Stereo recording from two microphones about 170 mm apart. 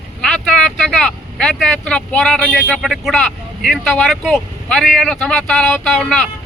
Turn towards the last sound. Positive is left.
turn(degrees=5)  # may be behind; listen again after turning